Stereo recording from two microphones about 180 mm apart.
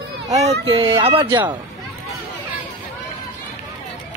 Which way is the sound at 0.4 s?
35° right (ahead or behind).